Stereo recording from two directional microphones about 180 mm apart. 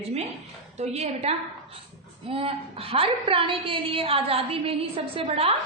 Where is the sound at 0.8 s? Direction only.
35° right (ahead or behind).